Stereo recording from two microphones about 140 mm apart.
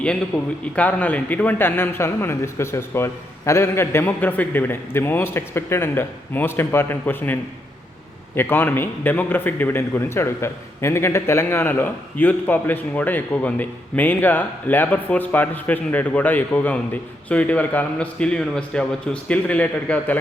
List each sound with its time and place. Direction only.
0.0 s a man's voice: 10° left (ahead or behind)
8.4 s a man's voice: 15° left (ahead or behind)